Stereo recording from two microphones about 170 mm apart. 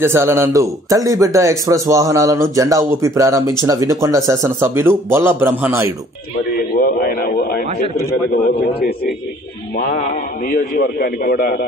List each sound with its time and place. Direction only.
0.0 s a man's voice: 15° right (ahead or behind)
6.5 s a sound: 60° left (ahead or behind)
8.1 s a man's voice: 55° left (ahead or behind)
10.5 s a man's voice: 55° left (ahead or behind)